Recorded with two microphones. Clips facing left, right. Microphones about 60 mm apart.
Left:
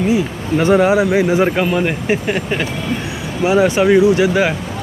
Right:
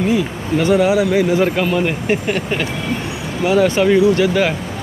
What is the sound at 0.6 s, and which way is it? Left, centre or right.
Speech, left.